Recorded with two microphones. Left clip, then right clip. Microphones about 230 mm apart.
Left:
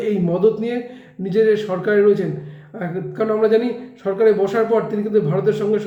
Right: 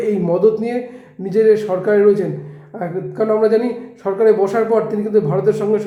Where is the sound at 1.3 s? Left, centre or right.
Centre.